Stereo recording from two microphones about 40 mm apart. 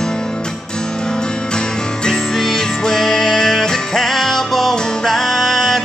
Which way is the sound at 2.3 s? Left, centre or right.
Centre.